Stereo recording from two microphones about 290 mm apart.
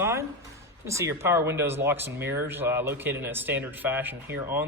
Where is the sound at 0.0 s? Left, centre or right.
Centre.